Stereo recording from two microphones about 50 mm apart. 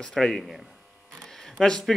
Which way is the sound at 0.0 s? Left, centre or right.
Centre.